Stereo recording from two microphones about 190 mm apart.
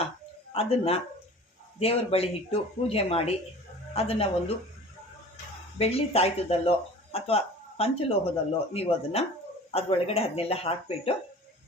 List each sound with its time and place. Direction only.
0.5 s speech: 30° left (ahead or behind)
5.7 s speech: 30° left (ahead or behind)